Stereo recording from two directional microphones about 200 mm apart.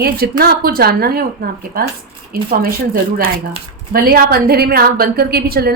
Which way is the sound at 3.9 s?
45° right (ahead or behind).